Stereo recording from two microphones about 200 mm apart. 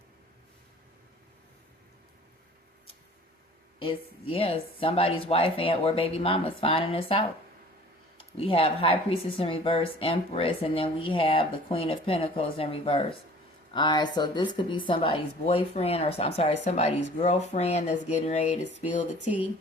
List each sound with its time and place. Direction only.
3.8 s speech: 25° left (ahead or behind)